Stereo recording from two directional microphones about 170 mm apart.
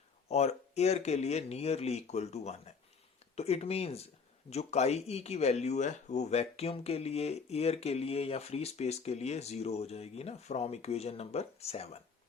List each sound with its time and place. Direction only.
0.3 s speech: 40° left (ahead or behind)